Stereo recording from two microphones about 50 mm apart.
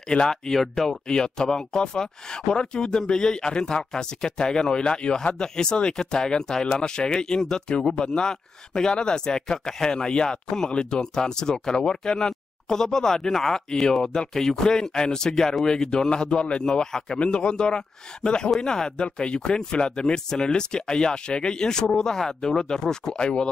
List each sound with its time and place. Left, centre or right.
0.1 s speech: centre